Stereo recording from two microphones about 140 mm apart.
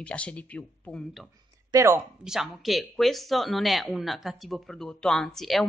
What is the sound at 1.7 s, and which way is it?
Speech, 20° right (ahead or behind).